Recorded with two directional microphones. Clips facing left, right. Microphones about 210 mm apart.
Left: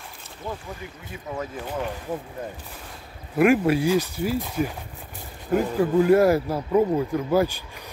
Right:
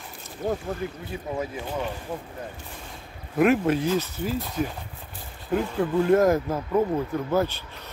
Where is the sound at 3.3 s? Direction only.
10° left (ahead or behind).